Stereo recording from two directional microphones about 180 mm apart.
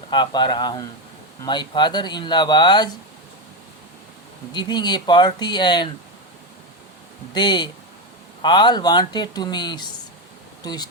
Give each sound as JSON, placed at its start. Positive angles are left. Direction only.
{"t": 0.1, "sound": "speech", "side_deg": 25}
{"t": 4.5, "sound": "speech", "side_deg": 25}
{"t": 7.3, "sound": "speech", "side_deg": 25}